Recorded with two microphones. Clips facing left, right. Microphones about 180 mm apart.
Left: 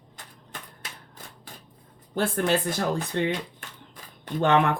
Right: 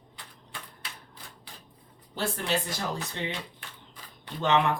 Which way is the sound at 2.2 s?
55° left (ahead or behind).